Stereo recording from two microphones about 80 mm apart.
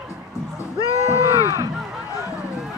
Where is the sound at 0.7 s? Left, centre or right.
Left.